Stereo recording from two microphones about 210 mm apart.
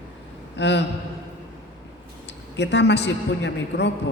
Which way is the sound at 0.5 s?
55° left (ahead or behind).